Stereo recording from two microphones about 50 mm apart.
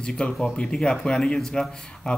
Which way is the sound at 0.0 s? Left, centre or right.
Centre.